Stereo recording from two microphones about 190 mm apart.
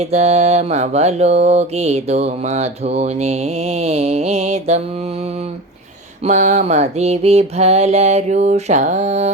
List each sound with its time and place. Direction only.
0.0 s mantra: 35° right (ahead or behind)
6.2 s mantra: 35° right (ahead or behind)